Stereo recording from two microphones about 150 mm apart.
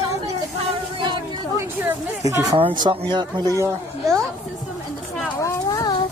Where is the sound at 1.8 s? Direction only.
25° right (ahead or behind).